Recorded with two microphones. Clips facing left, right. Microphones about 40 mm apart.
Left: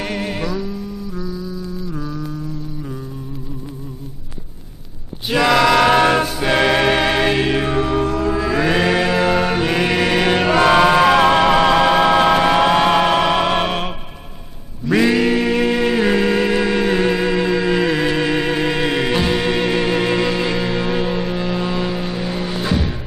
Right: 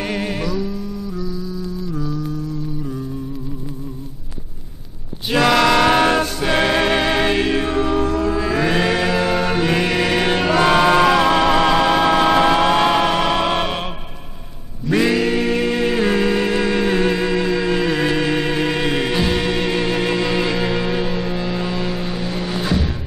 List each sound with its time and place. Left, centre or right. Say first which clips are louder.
0.0 s music: even; centre
5.3 s a sound: even; centre
5.7 s music: left 1 dB; centre
11.0 s music: left 2 dB; left
15.1 s music: left 2 dB; centre
20.3 s music: even; centre